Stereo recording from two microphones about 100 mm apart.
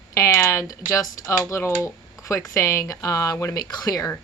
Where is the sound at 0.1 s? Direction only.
30° left (ahead or behind).